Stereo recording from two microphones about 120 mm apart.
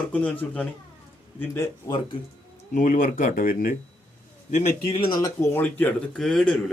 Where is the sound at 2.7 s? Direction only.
90° left.